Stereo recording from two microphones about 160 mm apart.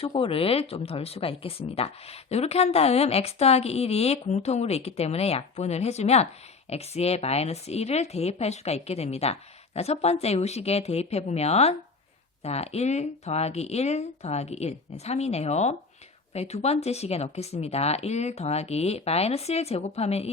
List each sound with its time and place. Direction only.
0.0 s a woman's voice: 35° left (ahead or behind)